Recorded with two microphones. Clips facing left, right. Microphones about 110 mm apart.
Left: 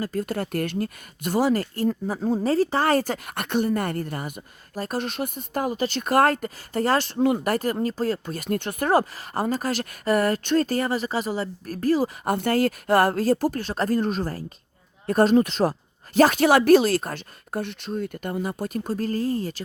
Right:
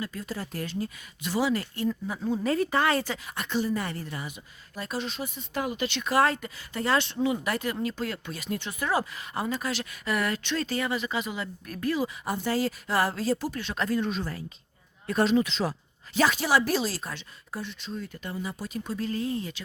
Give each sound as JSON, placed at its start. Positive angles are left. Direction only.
{"t": 0.0, "sound": "speech", "side_deg": 45}